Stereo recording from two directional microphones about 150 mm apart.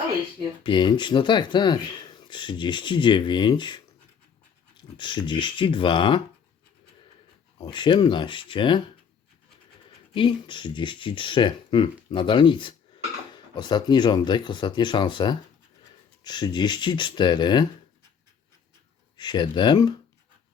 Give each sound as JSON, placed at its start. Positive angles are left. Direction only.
{"t": 0.6, "sound": "speech", "side_deg": 30}
{"t": 4.9, "sound": "speech", "side_deg": 30}
{"t": 7.6, "sound": "speech", "side_deg": 30}
{"t": 10.2, "sound": "speech", "side_deg": 30}
{"t": 19.1, "sound": "speech", "side_deg": 30}